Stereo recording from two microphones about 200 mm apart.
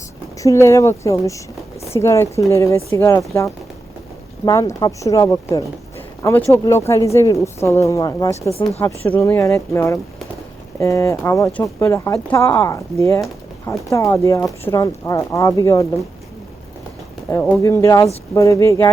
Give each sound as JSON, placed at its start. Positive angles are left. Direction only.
{"t": 0.3, "sound": "speech", "side_deg": 15}
{"t": 17.2, "sound": "speech", "side_deg": 15}